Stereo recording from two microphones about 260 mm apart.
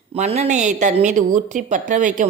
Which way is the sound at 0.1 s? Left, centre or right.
Right.